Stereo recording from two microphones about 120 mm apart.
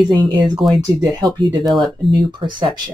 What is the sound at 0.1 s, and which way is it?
Speech, 35° right (ahead or behind).